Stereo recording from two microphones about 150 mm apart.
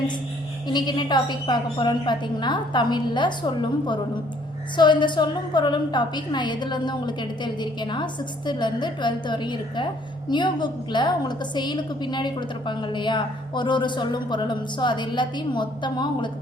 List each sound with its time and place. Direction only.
0.7 s a woman's voice: 30° left (ahead or behind)